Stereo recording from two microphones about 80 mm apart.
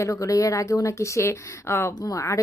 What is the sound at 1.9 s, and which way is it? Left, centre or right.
Speech, left.